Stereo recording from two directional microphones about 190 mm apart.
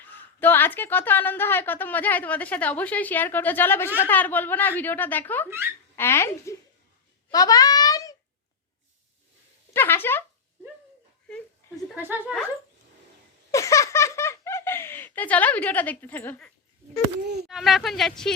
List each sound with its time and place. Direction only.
0.0 s a woman's voice: 10° left (ahead or behind)
7.3 s a sound: 20° left (ahead or behind)
9.7 s speech: 10° left (ahead or behind)
12.0 s speech: 10° right (ahead or behind)
13.5 s giggle: 15° left (ahead or behind)
17.5 s speech: centre (ahead or behind)